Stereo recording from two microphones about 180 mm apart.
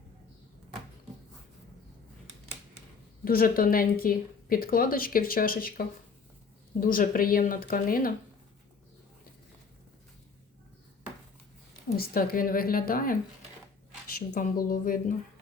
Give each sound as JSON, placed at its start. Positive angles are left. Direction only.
{"t": 3.2, "sound": "speech", "side_deg": 55}
{"t": 11.9, "sound": "speech", "side_deg": 55}
{"t": 14.2, "sound": "speech", "side_deg": 55}